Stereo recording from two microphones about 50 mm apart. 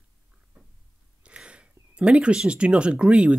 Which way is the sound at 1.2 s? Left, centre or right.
Right.